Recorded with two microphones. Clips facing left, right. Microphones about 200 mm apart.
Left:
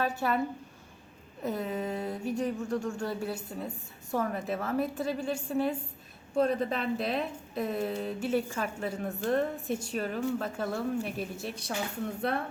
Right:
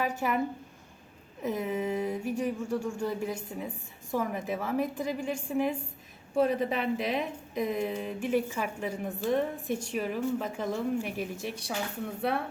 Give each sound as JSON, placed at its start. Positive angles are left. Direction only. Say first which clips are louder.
{"t": 0.0, "sound": "a woman's voice", "louder": "even", "side_deg": -15}
{"t": 1.4, "sound": "a woman's voice", "louder": "right 2 dB", "side_deg": -10}